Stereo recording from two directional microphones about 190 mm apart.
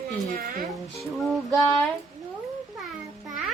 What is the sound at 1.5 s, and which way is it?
Speech, centre (ahead or behind).